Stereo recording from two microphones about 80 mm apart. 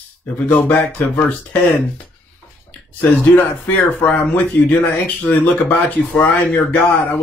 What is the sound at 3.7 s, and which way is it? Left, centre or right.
Speech, left.